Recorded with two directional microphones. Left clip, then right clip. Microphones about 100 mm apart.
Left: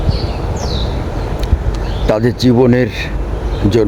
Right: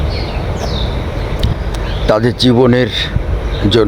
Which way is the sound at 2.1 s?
35° left (ahead or behind).